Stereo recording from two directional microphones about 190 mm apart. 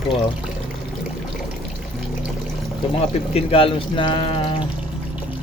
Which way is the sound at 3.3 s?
30° left (ahead or behind).